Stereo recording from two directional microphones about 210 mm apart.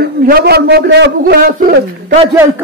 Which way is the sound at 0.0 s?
45° right (ahead or behind).